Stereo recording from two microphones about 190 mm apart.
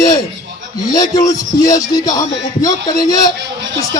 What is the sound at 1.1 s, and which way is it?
Music, 20° left (ahead or behind).